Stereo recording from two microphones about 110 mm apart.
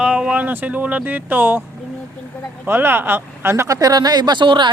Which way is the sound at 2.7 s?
20° right (ahead or behind).